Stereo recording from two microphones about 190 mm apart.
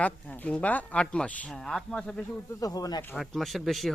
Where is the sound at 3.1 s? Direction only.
Centre (ahead or behind).